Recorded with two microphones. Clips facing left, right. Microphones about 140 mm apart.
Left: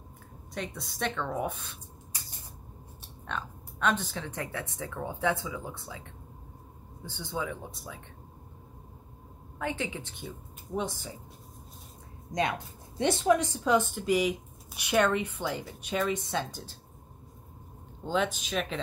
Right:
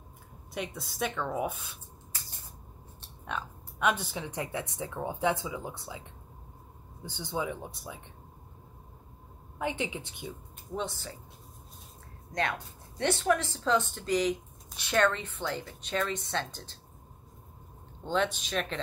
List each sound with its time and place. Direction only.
0.6 s a woman's voice: 5° right (ahead or behind)
2.1 s a sound: 15° left (ahead or behind)
3.3 s speech: 10° right (ahead or behind)
7.1 s speech: 15° right (ahead or behind)
9.6 s speech: 15° right (ahead or behind)
10.8 s speech: 10° left (ahead or behind)
12.3 s speech: 15° left (ahead or behind)
18.0 s a woman's voice: 5° left (ahead or behind)